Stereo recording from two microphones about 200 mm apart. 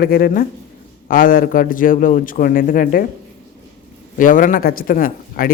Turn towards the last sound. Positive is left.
turn(degrees=45)  # may be behind; listen again after turning